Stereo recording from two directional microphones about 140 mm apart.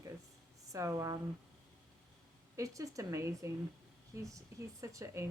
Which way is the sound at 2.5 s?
25° right (ahead or behind).